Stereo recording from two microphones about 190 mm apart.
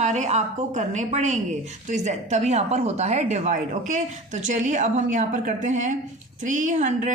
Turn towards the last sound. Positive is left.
turn(degrees=-40)  # may be behind; listen again after turning